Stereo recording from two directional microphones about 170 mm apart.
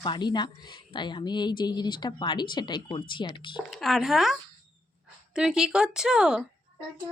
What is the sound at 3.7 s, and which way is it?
Speech, centre (ahead or behind).